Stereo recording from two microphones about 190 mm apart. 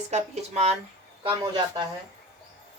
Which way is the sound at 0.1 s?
35° right (ahead or behind).